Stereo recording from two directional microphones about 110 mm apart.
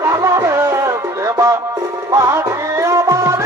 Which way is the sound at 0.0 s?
25° right (ahead or behind).